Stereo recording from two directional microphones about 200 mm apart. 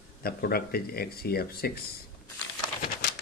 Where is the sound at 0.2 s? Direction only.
50° left (ahead or behind).